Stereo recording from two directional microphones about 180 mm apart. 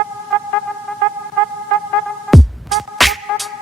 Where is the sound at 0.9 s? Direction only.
5° left (ahead or behind).